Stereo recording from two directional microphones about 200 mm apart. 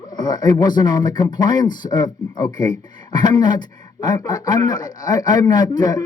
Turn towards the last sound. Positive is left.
turn(degrees=20)  # may be behind; listen again after turning